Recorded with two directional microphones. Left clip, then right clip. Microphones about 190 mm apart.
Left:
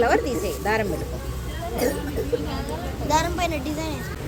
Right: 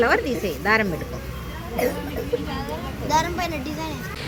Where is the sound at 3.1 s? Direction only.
45° left (ahead or behind).